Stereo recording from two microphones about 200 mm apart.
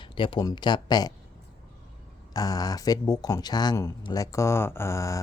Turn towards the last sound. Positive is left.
turn(degrees=15)  # may be behind; listen again after turning